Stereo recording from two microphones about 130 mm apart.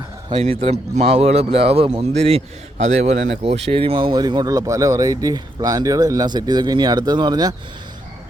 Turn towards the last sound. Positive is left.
turn(degrees=-30)  # may be behind; listen again after turning